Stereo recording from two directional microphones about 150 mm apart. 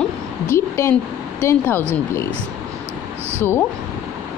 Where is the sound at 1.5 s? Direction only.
15° left (ahead or behind).